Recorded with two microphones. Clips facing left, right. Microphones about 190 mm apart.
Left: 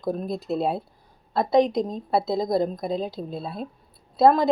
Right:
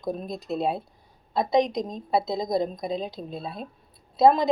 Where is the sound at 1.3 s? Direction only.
20° right (ahead or behind).